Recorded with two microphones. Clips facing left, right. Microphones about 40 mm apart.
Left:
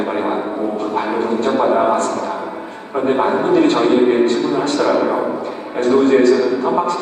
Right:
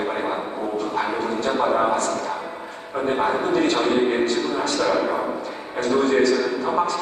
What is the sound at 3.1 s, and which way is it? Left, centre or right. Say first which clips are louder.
Speech: left 6 dB; left.